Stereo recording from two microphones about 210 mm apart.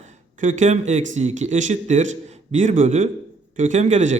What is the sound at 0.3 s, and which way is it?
A man's voice, 35° right (ahead or behind).